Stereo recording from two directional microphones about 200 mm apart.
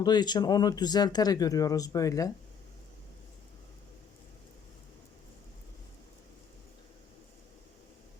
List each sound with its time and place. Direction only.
0.0 s speech: 20° left (ahead or behind)